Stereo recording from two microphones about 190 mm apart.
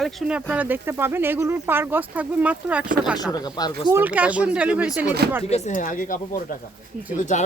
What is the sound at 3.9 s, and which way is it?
Speech, 10° right (ahead or behind).